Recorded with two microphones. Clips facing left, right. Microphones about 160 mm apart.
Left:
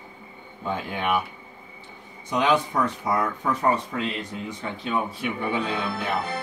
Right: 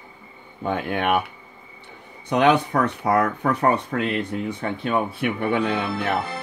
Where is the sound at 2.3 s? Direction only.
60° right (ahead or behind).